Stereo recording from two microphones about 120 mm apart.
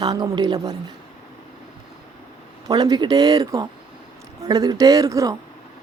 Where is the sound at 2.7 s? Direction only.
35° right (ahead or behind).